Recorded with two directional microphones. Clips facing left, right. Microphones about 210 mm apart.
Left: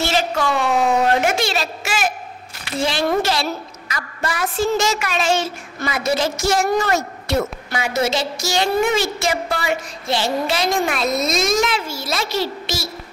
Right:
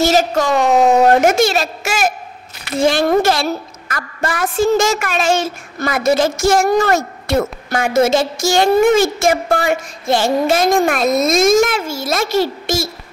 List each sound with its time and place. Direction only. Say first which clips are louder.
0.0 s a woman's voice: right 6 dB; 40° right (ahead or behind)